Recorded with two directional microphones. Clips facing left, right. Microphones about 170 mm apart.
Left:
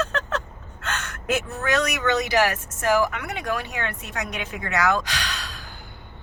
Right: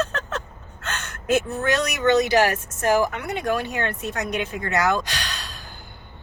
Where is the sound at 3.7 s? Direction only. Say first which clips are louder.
Right 4 dB; 35° right (ahead or behind).